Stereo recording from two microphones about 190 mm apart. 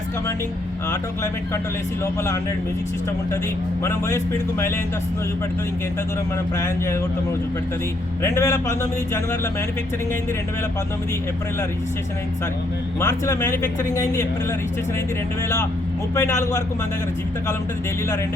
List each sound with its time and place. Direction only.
3.8 s speech: 15° left (ahead or behind)
6.6 s speech: 15° left (ahead or behind)
8.2 s speech: 15° left (ahead or behind)
13.0 s speech: 15° left (ahead or behind)
16.1 s speech: 15° left (ahead or behind)